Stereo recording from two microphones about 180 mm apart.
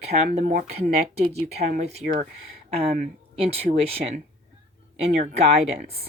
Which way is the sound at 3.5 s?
35° right (ahead or behind).